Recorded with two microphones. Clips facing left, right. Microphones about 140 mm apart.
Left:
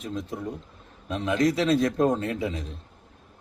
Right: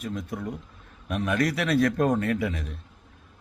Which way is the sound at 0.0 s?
25° left (ahead or behind).